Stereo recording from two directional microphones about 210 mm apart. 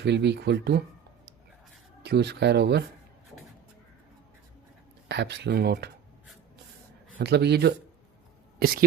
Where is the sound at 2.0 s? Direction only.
55° right (ahead or behind).